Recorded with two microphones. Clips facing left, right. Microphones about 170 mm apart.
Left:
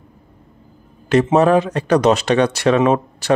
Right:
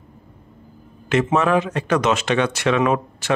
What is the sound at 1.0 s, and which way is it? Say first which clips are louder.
A man's voice: left 5 dB; 35° left (ahead or behind).